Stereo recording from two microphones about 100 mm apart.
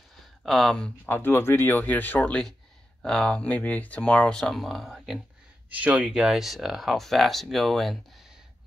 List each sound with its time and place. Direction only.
0.2 s speech: 5° left (ahead or behind)
1.0 s speech: 20° left (ahead or behind); by 8.0 s centre (ahead or behind)